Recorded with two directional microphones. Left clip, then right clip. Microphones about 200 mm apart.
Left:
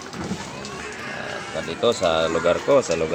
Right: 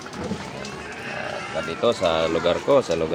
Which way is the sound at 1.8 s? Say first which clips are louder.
Left 1 dB; centre (ahead or behind).